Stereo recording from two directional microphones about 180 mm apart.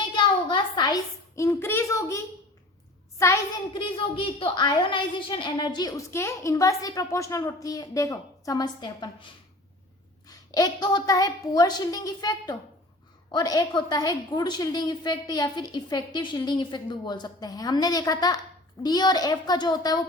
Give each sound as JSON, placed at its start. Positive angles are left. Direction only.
{"t": 0.2, "sound": "a sound", "side_deg": 25}
{"t": 1.4, "sound": "a child's voice", "side_deg": 15}
{"t": 3.8, "sound": "a woman's voice", "side_deg": 30}
{"t": 10.2, "sound": "a woman's voice", "side_deg": 20}